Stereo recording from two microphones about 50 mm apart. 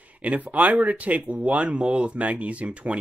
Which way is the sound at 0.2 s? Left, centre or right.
Right.